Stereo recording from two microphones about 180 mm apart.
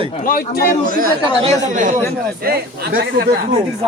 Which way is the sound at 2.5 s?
60° right (ahead or behind).